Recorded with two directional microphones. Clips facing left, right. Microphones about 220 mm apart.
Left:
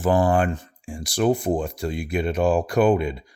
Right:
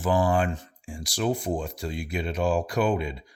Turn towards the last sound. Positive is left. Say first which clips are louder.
# left 6 dB
turn(degrees=55)  # may be behind; listen again after turning